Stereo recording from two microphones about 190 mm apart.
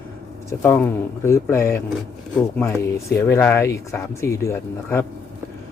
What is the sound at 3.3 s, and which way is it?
Speech, 10° left (ahead or behind).